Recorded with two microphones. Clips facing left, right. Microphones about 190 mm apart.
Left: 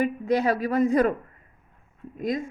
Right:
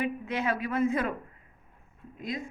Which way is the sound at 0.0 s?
40° left (ahead or behind).